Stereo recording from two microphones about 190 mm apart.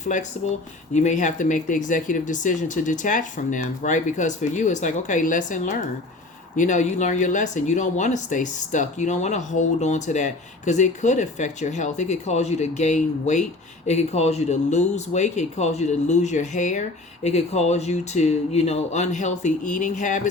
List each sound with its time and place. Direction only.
0.4 s speech: 35° left (ahead or behind)